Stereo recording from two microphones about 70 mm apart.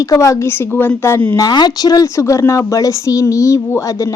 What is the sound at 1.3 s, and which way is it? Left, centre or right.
Speech, left.